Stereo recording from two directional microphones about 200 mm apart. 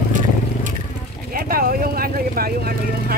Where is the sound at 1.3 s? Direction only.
45° right (ahead or behind).